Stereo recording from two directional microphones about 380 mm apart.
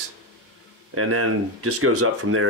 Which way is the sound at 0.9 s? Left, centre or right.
Right.